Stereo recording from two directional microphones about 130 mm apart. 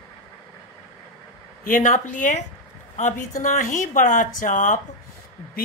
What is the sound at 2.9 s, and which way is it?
Speech, 70° left (ahead or behind).